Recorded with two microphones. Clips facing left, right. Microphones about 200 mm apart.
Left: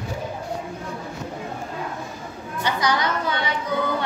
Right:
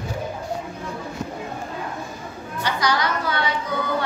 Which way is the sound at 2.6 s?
20° left (ahead or behind).